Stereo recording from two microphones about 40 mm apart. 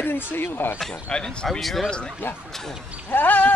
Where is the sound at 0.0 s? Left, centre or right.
Left.